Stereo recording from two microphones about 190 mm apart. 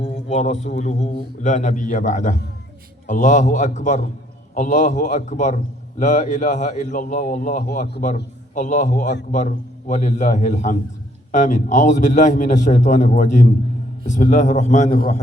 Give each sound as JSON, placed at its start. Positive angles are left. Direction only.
{"t": 0.0, "sound": "a man's voice", "side_deg": 35}